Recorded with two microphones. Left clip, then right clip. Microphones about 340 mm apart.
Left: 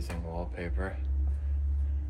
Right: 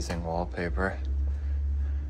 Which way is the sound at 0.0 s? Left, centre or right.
Centre.